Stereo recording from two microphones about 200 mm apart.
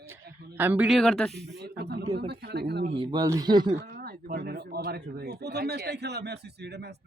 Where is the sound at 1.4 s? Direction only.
55° right (ahead or behind).